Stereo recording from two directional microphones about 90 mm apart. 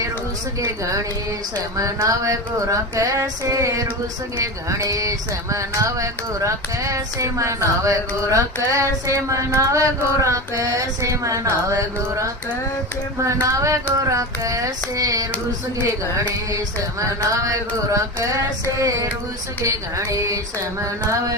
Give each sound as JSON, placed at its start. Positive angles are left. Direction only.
{"t": 0.6, "sound": "speech", "side_deg": -40}
{"t": 16.5, "sound": "speech", "side_deg": -35}
{"t": 20.1, "sound": "speech", "side_deg": -35}